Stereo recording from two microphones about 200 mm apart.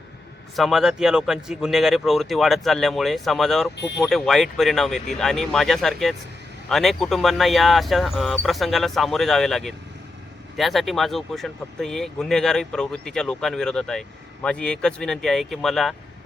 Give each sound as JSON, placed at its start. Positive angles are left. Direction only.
{"t": 0.5, "sound": "speech", "side_deg": 0}